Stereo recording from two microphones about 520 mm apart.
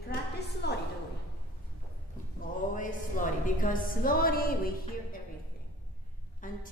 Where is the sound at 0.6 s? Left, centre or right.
Centre.